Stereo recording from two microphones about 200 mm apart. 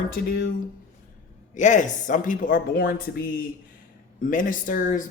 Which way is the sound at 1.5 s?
40° left (ahead or behind).